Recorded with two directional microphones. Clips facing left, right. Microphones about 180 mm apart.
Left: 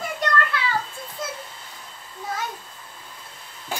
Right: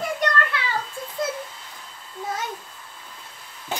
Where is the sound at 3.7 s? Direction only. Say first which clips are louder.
Right 1 dB; 20° right (ahead or behind).